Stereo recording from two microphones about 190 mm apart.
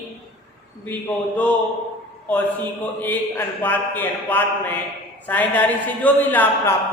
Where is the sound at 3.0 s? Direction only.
10° left (ahead or behind).